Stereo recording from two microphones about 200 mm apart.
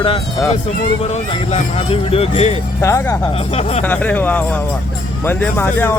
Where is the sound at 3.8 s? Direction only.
10° left (ahead or behind).